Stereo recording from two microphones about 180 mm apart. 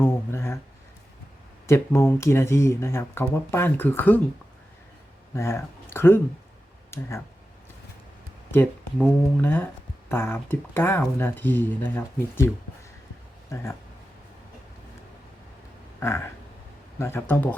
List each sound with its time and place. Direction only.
0.0 s a sound: 15° left (ahead or behind)
1.6 s speech: 15° left (ahead or behind)
5.3 s speech: 15° left (ahead or behind)
8.5 s speech: 10° left (ahead or behind)
13.5 s speech: 15° left (ahead or behind)
16.0 s a sound: 15° left (ahead or behind)
17.0 s speech: 10° left (ahead or behind)